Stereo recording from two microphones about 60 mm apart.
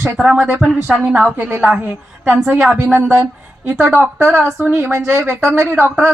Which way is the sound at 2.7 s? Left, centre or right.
Right.